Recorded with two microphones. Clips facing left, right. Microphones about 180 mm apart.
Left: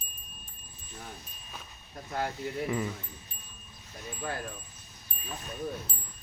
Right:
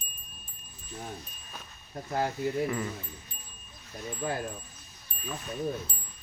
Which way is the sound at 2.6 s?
10° left (ahead or behind).